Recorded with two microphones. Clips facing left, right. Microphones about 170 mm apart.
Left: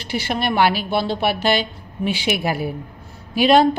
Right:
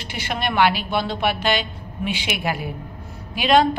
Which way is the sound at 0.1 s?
35° left (ahead or behind).